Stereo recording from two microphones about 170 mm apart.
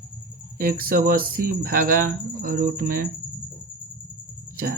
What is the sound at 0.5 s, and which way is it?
Speech, 60° right (ahead or behind).